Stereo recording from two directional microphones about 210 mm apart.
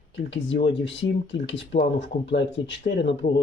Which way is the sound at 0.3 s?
60° left (ahead or behind).